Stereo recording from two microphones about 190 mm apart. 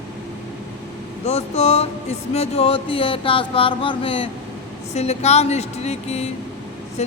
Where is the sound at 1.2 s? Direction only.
35° left (ahead or behind).